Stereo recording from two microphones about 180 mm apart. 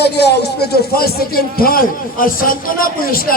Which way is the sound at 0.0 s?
65° left (ahead or behind).